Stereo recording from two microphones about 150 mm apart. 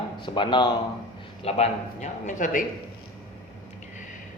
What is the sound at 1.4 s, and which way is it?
Speech, 50° left (ahead or behind).